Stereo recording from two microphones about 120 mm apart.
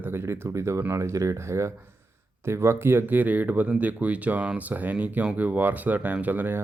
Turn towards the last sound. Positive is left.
turn(degrees=-15)  # may be behind; listen again after turning